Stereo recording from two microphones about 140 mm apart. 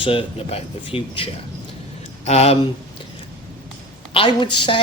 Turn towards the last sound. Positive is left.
turn(degrees=35)  # may be behind; listen again after turning